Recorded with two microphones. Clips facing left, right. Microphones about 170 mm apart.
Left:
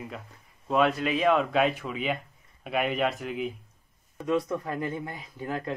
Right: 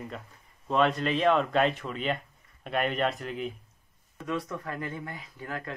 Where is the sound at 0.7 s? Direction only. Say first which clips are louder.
Left 1 dB; 5° left (ahead or behind).